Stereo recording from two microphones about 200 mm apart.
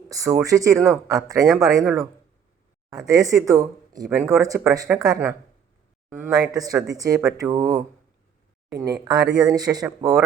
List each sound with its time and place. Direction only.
0.1 s speech: 15° right (ahead or behind)
3.1 s speech: 15° right (ahead or behind)